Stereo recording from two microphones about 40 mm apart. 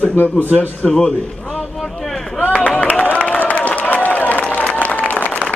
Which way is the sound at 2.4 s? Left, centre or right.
Left.